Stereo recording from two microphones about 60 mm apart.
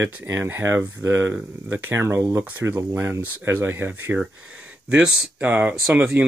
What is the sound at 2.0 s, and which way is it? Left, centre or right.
Speech, right.